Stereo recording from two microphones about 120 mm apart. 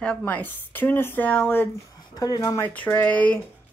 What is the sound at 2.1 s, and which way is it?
Speech, 35° left (ahead or behind).